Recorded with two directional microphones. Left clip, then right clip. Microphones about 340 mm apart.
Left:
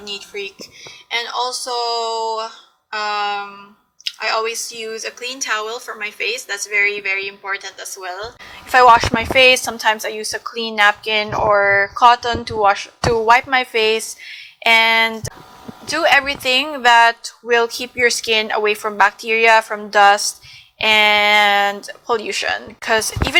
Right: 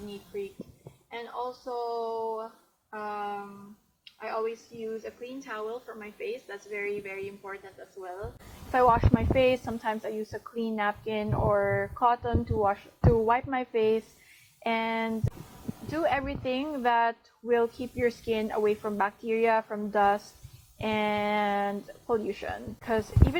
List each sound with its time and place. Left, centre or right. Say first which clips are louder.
1.1 s a woman's voice: left 15 dB; centre
2.9 s a woman's voice: left 14 dB; centre
4.0 s a sound: left 17 dB; centre
4.4 s a woman's voice: left 11 dB; centre